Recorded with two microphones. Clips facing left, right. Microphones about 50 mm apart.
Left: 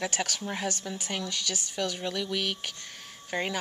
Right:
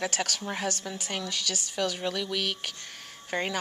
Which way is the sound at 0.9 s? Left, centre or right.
Centre.